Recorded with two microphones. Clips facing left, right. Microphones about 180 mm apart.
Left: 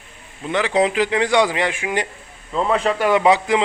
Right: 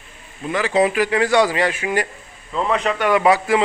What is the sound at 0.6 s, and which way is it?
A man's voice, 15° left (ahead or behind).